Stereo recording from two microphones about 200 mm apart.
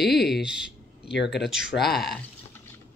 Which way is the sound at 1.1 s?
60° left (ahead or behind).